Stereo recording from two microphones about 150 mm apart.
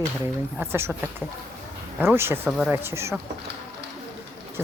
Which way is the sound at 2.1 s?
15° right (ahead or behind).